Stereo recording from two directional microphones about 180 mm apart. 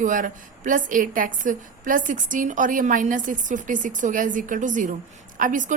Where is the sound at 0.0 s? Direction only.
45° right (ahead or behind).